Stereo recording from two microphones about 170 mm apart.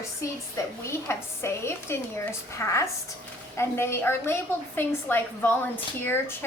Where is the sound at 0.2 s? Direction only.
15° left (ahead or behind).